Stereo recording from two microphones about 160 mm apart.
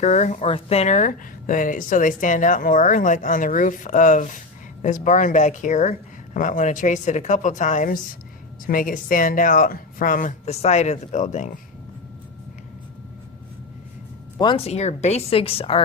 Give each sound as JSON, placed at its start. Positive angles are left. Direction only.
{"t": 0.0, "sound": "a woman's voice", "side_deg": 45}
{"t": 10.4, "sound": "speech", "side_deg": 40}
{"t": 14.3, "sound": "speech", "side_deg": 30}